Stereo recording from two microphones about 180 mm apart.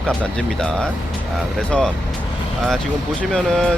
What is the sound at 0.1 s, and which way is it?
Speech, 5° left (ahead or behind).